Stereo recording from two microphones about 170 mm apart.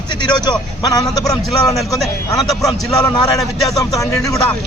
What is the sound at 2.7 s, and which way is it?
Speech, 20° left (ahead or behind).